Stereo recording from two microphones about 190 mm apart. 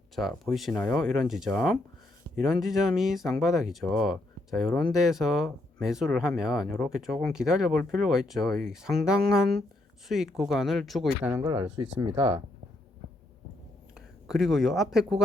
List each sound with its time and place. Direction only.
0.2 s speech: centre (ahead or behind)
11.2 s speech: 10° right (ahead or behind)
12.1 s speech: 30° right (ahead or behind)
14.3 s speech: centre (ahead or behind)